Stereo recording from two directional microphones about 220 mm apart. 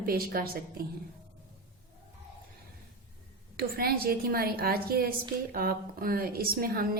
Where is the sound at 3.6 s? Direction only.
45° right (ahead or behind).